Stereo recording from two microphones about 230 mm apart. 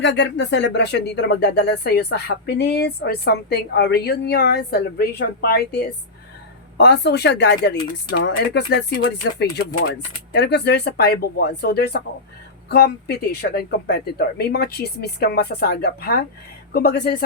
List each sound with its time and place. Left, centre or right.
0.0 s speech: left